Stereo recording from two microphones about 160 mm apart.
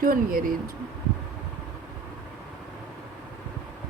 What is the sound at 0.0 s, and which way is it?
Speech, 65° right (ahead or behind).